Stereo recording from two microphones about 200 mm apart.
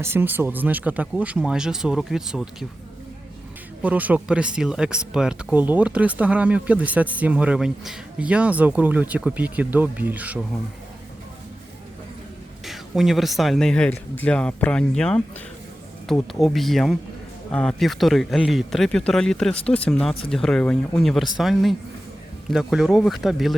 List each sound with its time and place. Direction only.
0.0 s speech: 10° right (ahead or behind)
3.8 s speech: 10° right (ahead or behind)
12.6 s speech: centre (ahead or behind)